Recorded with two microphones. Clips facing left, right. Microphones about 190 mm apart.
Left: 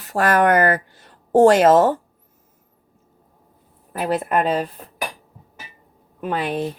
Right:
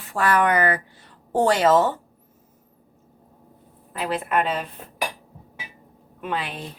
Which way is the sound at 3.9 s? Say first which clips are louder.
Left 4 dB; 45° left (ahead or behind).